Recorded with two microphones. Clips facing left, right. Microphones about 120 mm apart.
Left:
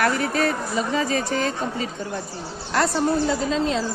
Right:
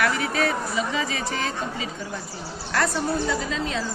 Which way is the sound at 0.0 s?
40° left (ahead or behind).